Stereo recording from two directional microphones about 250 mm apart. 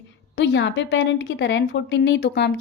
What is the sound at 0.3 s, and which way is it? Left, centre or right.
A woman's voice, left.